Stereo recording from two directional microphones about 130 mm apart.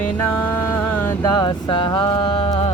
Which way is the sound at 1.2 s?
35° left (ahead or behind).